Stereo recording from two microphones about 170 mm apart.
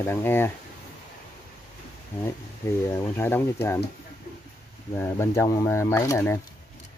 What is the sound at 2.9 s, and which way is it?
Speech, 15° left (ahead or behind).